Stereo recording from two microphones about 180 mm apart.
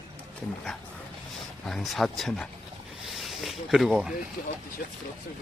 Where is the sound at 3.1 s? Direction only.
Centre (ahead or behind).